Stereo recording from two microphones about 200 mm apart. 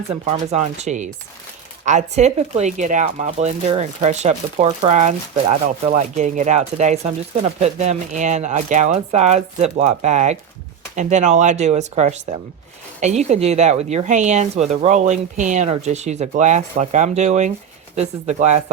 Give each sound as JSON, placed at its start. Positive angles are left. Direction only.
{"t": 0.1, "sound": "speech", "side_deg": -35}